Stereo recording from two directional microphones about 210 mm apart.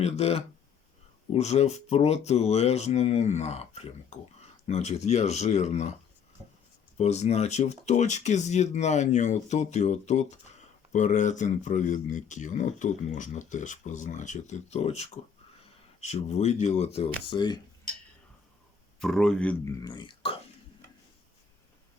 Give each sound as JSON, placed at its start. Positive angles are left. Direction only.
{"t": 0.0, "sound": "speech", "side_deg": 30}
{"t": 6.9, "sound": "speech", "side_deg": 30}
{"t": 18.9, "sound": "a man's voice", "side_deg": 0}
{"t": 19.8, "sound": "speech", "side_deg": 20}